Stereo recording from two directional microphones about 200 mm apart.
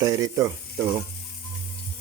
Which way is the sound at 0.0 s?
15° right (ahead or behind).